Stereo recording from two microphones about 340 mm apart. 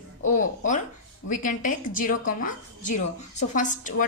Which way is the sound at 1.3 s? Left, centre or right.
Left.